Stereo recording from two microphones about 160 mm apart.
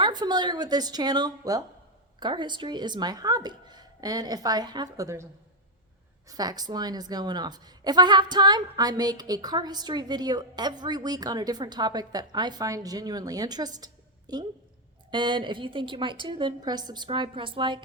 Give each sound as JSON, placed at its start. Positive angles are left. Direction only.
{"t": 0.0, "sound": "a woman's voice", "side_deg": -25}
{"t": 6.2, "sound": "a woman's voice", "side_deg": -25}